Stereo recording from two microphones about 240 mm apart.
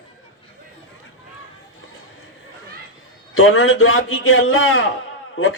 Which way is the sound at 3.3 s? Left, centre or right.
Left.